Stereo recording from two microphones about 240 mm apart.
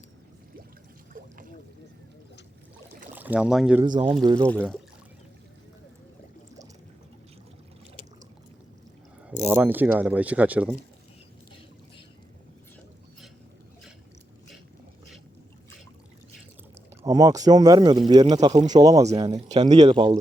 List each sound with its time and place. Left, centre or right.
3.2 s speech: centre
3.8 s speech: centre
4.4 s speech: centre
9.4 s speech: centre
17.0 s speech: centre